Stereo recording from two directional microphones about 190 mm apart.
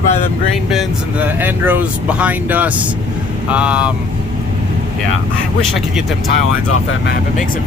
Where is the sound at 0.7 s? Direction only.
10° right (ahead or behind).